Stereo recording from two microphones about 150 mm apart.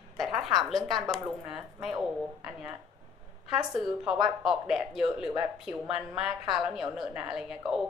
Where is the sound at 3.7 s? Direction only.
Centre (ahead or behind).